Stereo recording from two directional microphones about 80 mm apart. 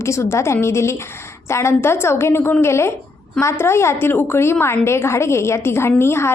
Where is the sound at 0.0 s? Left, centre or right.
Left.